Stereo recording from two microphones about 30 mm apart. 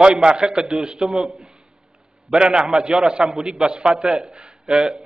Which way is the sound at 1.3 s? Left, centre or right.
Right.